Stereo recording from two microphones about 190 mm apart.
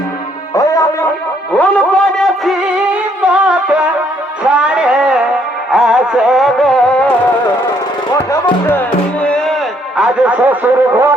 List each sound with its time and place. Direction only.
0.5 s music: 15° left (ahead or behind)
1.5 s music: 5° left (ahead or behind)
4.4 s a sound: 5° right (ahead or behind)
5.7 s music: 5° right (ahead or behind)
8.1 s music: 15° left (ahead or behind)
10.0 s a sound: 5° right (ahead or behind)